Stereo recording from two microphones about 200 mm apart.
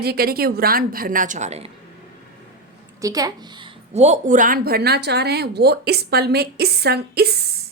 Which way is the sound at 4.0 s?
35° right (ahead or behind).